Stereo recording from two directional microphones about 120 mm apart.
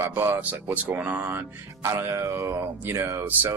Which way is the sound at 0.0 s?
20° right (ahead or behind).